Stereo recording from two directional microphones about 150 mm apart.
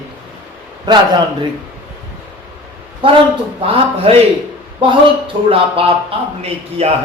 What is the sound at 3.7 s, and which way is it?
A man's voice, 40° right (ahead or behind).